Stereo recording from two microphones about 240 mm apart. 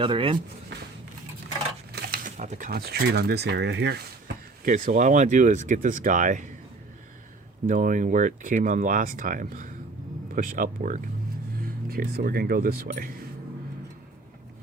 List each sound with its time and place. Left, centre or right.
0.0 s speech: right
1.9 s speech: right
4.6 s speech: right
7.7 s speech: right